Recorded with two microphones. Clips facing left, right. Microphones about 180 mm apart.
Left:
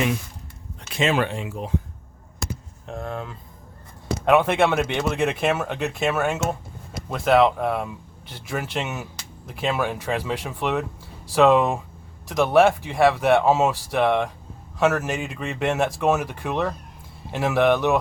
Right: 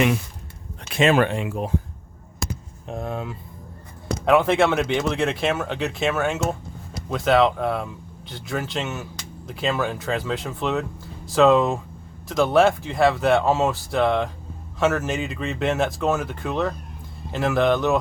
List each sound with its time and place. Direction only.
0.9 s speech: 55° right (ahead or behind)
2.8 s speech: 15° right (ahead or behind)
4.1 s speech: 5° left (ahead or behind)
9.5 s speech: centre (ahead or behind)